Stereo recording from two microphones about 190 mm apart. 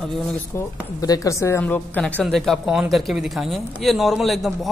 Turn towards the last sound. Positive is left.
turn(degrees=0)  # may be behind; listen again after turning